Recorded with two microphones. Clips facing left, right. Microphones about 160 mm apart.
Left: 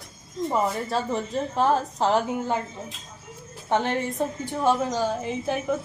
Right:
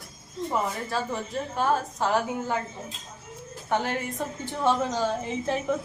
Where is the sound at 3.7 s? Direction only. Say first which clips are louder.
Left 3 dB; 25° left (ahead or behind).